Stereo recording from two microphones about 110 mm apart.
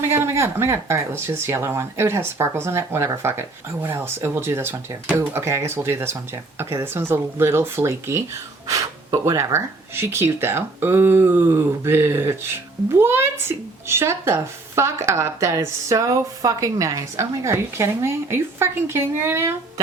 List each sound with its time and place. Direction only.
0.1 s speech: 20° right (ahead or behind)